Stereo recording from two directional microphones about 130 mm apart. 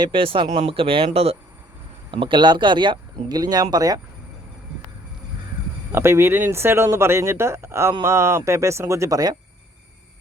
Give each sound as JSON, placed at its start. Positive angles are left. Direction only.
{"t": 0.0, "sound": "speech", "side_deg": -45}
{"t": 2.0, "sound": "speech", "side_deg": -40}
{"t": 5.9, "sound": "speech", "side_deg": -20}